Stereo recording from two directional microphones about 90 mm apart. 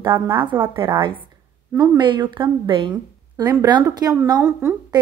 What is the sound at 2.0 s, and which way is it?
A woman's voice, 55° right (ahead or behind).